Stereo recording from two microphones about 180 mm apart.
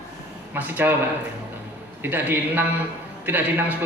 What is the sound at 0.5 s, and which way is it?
Speech, 10° right (ahead or behind).